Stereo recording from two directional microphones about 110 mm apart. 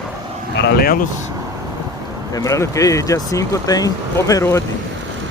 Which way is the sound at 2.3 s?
30° left (ahead or behind).